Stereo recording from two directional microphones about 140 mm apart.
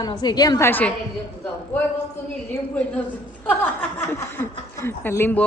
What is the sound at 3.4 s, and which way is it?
Speech, 10° left (ahead or behind).